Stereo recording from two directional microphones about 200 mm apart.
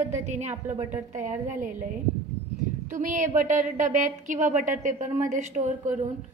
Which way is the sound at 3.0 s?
40° right (ahead or behind).